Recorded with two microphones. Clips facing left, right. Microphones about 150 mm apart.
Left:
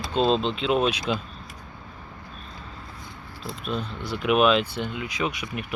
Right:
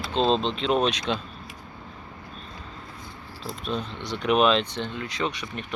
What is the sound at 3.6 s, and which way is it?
Speech, 5° left (ahead or behind).